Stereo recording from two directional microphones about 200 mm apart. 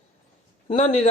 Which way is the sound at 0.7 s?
35° left (ahead or behind).